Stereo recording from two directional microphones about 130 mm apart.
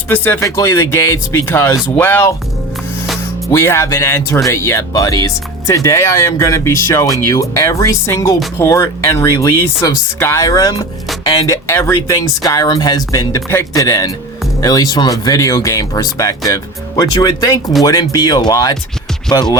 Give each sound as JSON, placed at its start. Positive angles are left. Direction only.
{"t": 0.1, "sound": "speech", "side_deg": 15}
{"t": 3.5, "sound": "speech", "side_deg": 20}
{"t": 11.7, "sound": "speech", "side_deg": 20}